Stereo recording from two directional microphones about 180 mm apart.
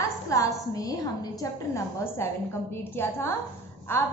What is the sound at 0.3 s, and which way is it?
A woman's voice, 20° left (ahead or behind).